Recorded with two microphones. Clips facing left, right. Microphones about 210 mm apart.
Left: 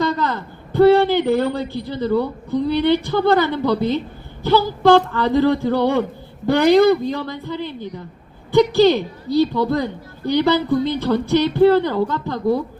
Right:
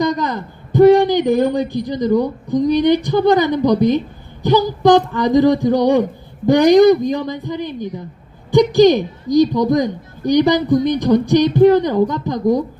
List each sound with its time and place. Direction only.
0.0 s a man's voice: 15° right (ahead or behind)